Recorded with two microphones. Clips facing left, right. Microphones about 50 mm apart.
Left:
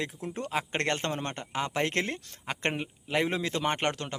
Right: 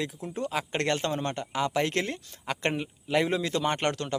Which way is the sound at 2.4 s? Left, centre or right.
Left.